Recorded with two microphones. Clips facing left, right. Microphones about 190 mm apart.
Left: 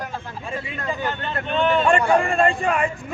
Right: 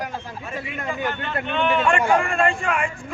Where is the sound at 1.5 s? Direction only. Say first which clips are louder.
Left 2 dB; 35° left (ahead or behind).